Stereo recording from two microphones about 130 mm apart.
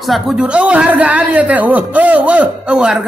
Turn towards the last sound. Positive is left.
turn(degrees=-5)  # may be behind; listen again after turning